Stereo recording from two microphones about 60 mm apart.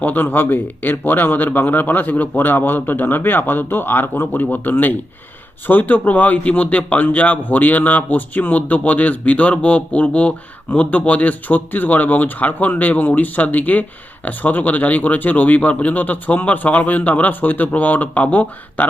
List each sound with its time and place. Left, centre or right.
0.0 s a man's voice: left